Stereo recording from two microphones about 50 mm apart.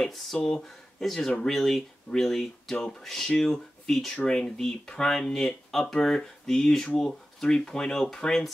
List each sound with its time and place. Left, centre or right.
0.0 s speech: centre